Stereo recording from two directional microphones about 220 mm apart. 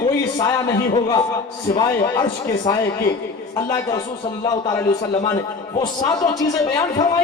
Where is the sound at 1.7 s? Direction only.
20° left (ahead or behind).